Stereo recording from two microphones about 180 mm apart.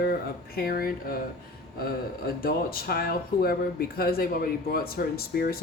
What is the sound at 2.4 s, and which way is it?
Speech, 55° left (ahead or behind).